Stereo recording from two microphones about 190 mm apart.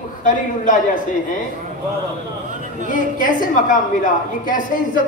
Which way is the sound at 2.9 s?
45° left (ahead or behind).